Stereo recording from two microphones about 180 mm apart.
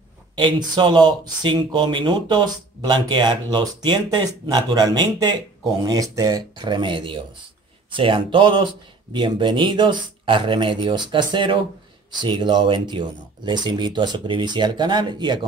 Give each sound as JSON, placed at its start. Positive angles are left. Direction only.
{"t": 0.4, "sound": "speech", "side_deg": -25}